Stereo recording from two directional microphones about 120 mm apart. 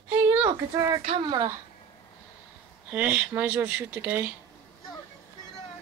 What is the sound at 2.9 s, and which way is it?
Speech, 10° right (ahead or behind).